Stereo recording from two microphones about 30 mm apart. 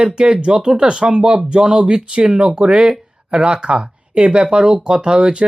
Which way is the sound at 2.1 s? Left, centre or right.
Right.